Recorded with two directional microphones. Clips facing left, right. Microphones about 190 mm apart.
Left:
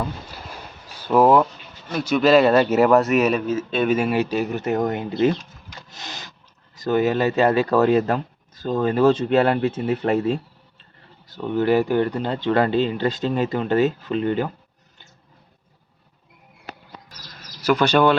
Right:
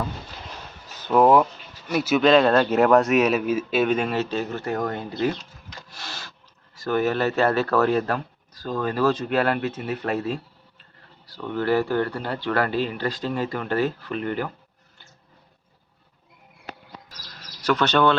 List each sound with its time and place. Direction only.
0.0 s a sound: 10° left (ahead or behind)
1.9 s speech: 5° right (ahead or behind)
3.4 s a man's voice: 10° right (ahead or behind)
3.8 s speech: 5° left (ahead or behind)
5.9 s a sound: 20° left (ahead or behind)
6.7 s speech: 20° left (ahead or behind)
17.6 s speech: 10° left (ahead or behind)